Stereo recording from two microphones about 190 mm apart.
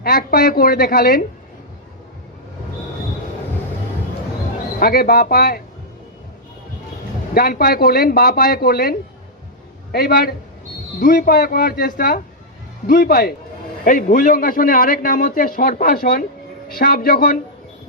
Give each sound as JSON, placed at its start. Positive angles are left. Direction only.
{"t": 0.0, "sound": "a man's voice", "side_deg": 50}
{"t": 4.8, "sound": "a man's voice", "side_deg": 50}
{"t": 7.3, "sound": "a man's voice", "side_deg": 50}